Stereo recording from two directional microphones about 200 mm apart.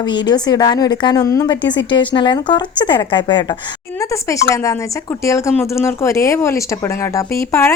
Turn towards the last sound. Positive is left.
turn(degrees=10)  # may be behind; listen again after turning